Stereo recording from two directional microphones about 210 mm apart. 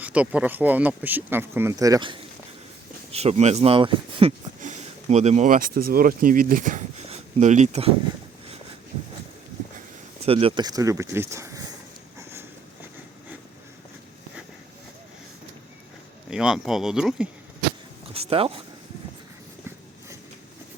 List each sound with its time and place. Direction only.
0.0 s speech: 5° right (ahead or behind)
3.1 s speech: 30° right (ahead or behind)
10.2 s speech: 25° right (ahead or behind)
16.3 s speech: 5° right (ahead or behind)
18.1 s speech: 25° right (ahead or behind)